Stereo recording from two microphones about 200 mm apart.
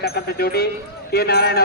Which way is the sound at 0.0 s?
50° left (ahead or behind).